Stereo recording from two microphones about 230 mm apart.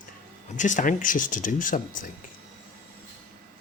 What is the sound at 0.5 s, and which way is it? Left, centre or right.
Speech, left.